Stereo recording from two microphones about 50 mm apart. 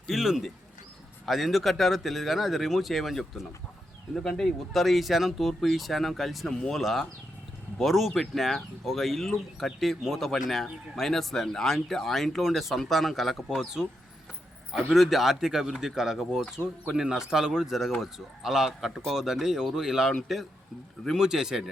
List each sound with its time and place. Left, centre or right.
0.1 s speech: centre
14.9 s speech: centre
21.2 s speech: centre